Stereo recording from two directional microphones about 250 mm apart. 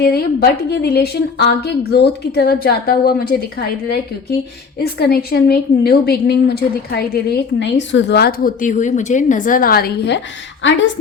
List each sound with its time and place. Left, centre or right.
0.0 s a woman's voice: left